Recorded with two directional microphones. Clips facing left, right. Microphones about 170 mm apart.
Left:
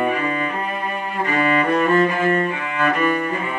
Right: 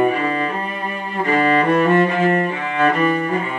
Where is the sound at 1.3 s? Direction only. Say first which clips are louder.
Right 3 dB; 35° right (ahead or behind).